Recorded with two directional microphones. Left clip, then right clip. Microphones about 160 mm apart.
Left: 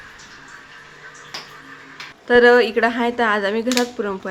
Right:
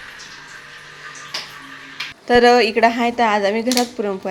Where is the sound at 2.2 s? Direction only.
10° right (ahead or behind).